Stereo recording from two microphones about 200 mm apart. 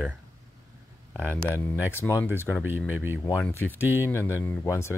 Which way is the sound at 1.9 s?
15° left (ahead or behind).